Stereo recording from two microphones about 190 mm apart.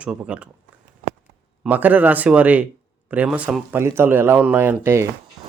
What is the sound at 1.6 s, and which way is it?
Speech, 10° right (ahead or behind).